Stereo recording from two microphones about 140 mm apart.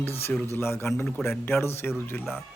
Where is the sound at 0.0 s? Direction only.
15° left (ahead or behind).